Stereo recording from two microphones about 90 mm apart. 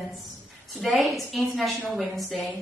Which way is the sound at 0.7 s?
Centre (ahead or behind).